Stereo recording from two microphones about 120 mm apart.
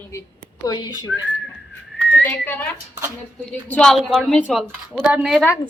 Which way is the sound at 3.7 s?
10° left (ahead or behind).